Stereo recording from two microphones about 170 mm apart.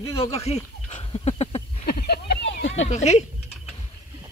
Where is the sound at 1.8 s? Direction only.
70° left (ahead or behind).